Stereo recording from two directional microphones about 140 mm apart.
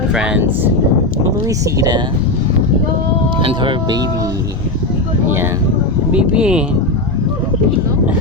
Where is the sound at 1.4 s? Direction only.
25° right (ahead or behind).